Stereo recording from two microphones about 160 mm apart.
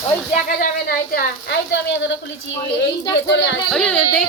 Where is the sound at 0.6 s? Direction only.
65° left (ahead or behind); by 2.1 s 90° left.